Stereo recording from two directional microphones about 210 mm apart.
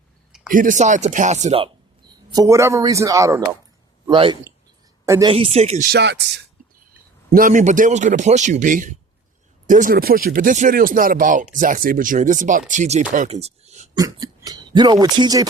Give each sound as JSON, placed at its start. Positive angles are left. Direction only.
{"t": 0.5, "sound": "speech", "side_deg": -40}
{"t": 2.3, "sound": "a man's voice", "side_deg": -15}
{"t": 5.3, "sound": "speech", "side_deg": -30}
{"t": 5.9, "sound": "speech", "side_deg": -55}
{"t": 7.3, "sound": "speech", "side_deg": -40}
{"t": 13.9, "sound": "speech", "side_deg": -20}